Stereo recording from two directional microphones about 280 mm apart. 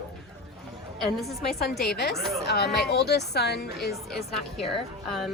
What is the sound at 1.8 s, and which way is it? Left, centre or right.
Speech, left.